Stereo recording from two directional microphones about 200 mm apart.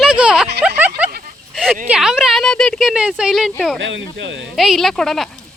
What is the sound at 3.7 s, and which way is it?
Speech, 65° right (ahead or behind).